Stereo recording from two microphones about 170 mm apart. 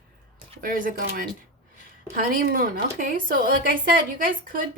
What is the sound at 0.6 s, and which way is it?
A woman's voice, 55° right (ahead or behind).